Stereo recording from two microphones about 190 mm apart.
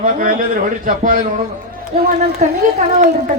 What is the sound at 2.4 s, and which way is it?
Speech, 40° right (ahead or behind).